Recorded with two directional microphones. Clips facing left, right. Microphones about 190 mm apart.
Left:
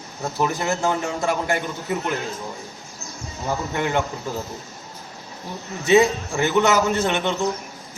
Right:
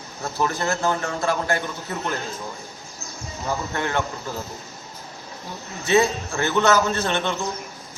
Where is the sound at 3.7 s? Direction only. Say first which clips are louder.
Left 3 dB; 15° left (ahead or behind).